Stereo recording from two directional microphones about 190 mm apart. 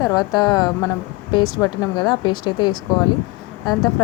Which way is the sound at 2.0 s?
20° left (ahead or behind).